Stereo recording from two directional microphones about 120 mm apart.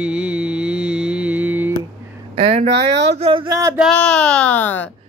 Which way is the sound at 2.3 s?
65° right (ahead or behind).